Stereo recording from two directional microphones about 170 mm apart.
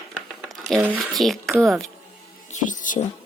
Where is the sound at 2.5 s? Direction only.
50° left (ahead or behind).